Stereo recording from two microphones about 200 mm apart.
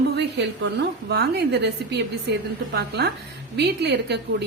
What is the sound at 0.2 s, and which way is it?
A woman's voice, 60° right (ahead or behind).